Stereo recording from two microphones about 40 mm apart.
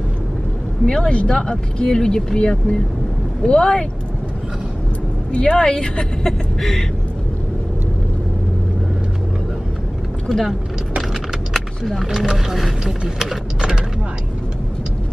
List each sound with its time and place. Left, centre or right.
0.8 s speech: left
5.3 s speech: left
6.2 s music: centre
10.2 s speech: centre
12.0 s speech: centre